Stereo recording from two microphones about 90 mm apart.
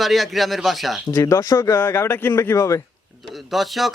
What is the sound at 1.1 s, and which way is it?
Speech, 40° left (ahead or behind).